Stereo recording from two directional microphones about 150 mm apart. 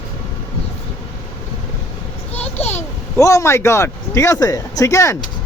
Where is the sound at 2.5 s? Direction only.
45° left (ahead or behind).